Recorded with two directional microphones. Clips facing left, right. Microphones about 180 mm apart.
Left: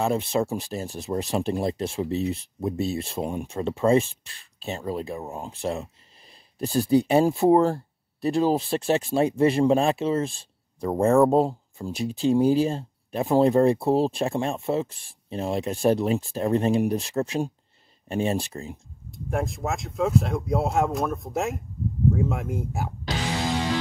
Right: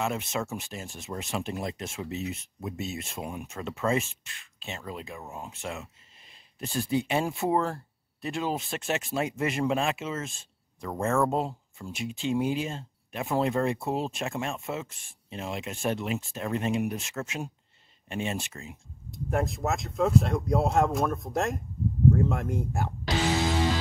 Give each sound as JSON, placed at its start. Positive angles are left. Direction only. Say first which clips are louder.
{"t": 0.0, "sound": "speech", "louder": "left 7 dB", "side_deg": 35}
{"t": 19.0, "sound": "speech", "louder": "left 1 dB", "side_deg": 0}